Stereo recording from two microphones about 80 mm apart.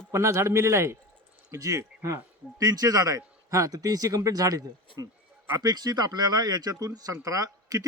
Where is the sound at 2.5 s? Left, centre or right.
Right.